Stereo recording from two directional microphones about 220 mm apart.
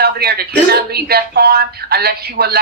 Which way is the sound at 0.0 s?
45° right (ahead or behind).